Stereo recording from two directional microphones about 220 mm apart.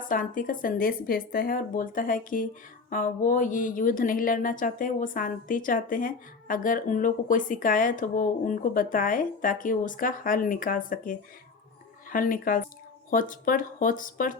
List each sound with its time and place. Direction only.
0.1 s speech: 40° left (ahead or behind)